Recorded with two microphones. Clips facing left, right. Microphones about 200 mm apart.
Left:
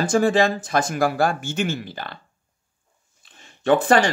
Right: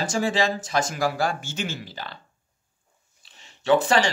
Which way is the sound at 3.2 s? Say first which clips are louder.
Left 11 dB; 50° left (ahead or behind).